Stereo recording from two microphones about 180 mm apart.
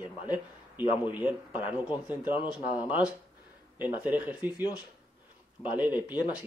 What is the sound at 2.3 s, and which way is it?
Speech, 25° left (ahead or behind).